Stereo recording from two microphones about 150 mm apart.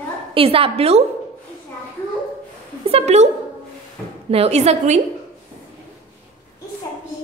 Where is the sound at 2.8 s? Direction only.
45° right (ahead or behind).